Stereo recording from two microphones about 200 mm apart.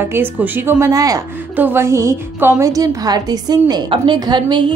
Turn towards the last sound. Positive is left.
turn(degrees=-25)  # may be behind; listen again after turning